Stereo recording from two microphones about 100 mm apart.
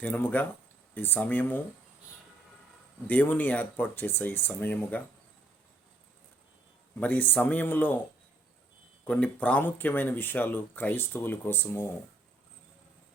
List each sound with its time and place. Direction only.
0.0 s speech: 20° left (ahead or behind)
3.1 s speech: 15° left (ahead or behind)
7.0 s speech: 15° left (ahead or behind)
9.0 s speech: 15° left (ahead or behind)